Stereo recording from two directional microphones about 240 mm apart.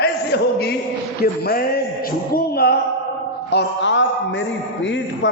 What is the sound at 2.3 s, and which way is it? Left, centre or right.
Music, left.